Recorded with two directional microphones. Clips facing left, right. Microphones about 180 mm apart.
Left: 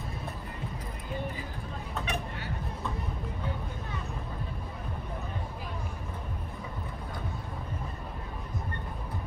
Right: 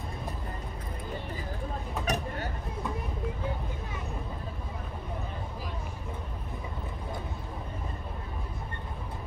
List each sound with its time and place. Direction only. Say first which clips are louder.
2.0 s vehicle: right 7 dB; 45° right (ahead or behind)